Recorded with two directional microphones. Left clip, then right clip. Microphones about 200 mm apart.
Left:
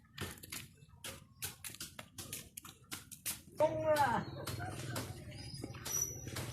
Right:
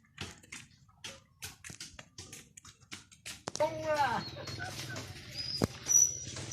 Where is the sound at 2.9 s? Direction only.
30° right (ahead or behind).